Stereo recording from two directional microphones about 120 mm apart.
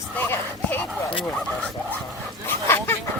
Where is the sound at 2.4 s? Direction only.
20° left (ahead or behind).